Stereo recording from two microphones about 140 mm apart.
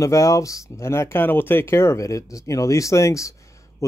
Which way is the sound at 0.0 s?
20° left (ahead or behind).